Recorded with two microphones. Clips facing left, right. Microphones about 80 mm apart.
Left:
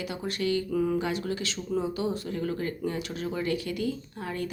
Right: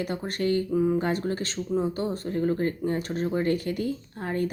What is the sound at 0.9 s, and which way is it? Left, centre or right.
Speech, right.